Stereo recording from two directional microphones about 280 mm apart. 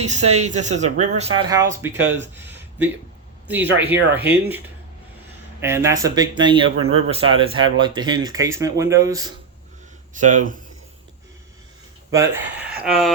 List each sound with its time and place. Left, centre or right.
0.1 s speech: right; by 2.1 s centre
2.3 s a sound: centre
3.4 s speech: centre
6.7 s speech: right
7.1 s speech: centre
10.2 s speech: right
12.1 s speech: centre